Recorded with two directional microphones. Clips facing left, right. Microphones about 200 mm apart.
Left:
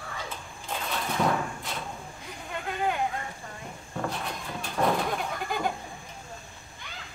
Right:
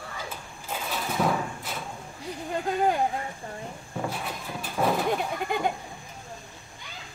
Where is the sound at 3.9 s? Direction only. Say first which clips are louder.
Even; 5° right (ahead or behind).